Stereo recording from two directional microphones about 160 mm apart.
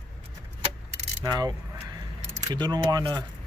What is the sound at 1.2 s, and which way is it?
Coin, 25° right (ahead or behind).